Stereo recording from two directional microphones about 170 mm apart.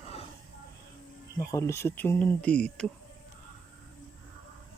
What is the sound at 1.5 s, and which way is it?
Speech, 15° left (ahead or behind).